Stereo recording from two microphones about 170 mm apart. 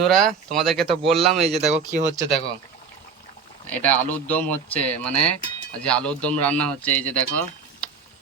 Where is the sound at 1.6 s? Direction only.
40° right (ahead or behind).